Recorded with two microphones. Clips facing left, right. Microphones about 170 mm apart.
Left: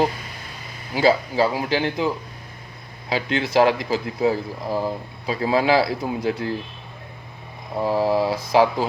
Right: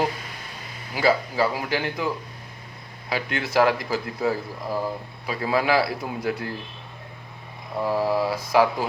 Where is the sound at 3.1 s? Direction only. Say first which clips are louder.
Left 3 dB; 25° left (ahead or behind).